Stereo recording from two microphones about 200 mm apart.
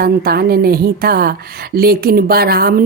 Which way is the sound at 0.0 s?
50° right (ahead or behind).